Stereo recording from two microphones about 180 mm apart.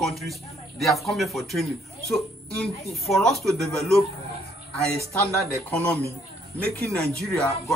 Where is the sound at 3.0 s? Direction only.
Centre (ahead or behind).